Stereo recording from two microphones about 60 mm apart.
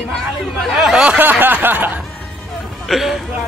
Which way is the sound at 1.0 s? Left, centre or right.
Right.